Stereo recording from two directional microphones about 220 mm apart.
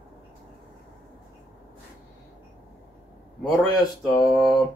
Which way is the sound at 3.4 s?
Centre (ahead or behind).